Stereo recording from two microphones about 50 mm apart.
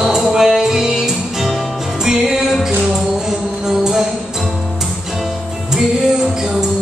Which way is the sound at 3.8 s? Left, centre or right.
Centre.